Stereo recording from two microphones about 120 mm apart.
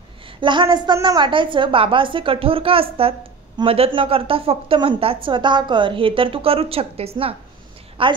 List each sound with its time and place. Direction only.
0.4 s a woman's voice: 40° right (ahead or behind)